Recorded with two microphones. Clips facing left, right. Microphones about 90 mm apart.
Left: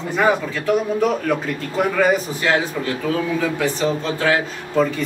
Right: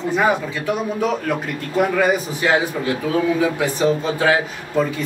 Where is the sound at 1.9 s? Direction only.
10° right (ahead or behind).